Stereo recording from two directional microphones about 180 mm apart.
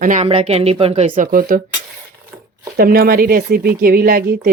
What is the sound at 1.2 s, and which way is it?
Speech, 50° right (ahead or behind).